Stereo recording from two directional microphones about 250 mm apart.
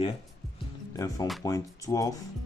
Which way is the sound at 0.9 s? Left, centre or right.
Centre.